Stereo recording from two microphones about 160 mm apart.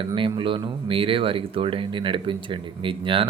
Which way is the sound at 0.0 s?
30° right (ahead or behind).